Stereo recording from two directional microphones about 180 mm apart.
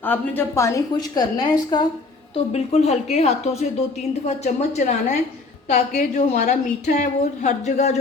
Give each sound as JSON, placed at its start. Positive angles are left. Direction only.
{"t": 0.0, "sound": "a woman's voice", "side_deg": 10}
{"t": 2.3, "sound": "a woman's voice", "side_deg": 35}